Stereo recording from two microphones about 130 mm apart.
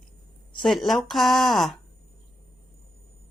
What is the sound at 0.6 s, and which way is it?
Speech, centre (ahead or behind).